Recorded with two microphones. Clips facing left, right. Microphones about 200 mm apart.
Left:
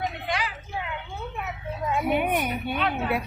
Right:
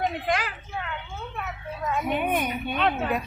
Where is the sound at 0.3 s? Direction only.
50° right (ahead or behind).